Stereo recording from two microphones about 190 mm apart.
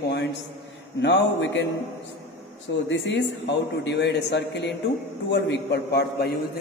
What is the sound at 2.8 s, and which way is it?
A man's voice, 70° left (ahead or behind).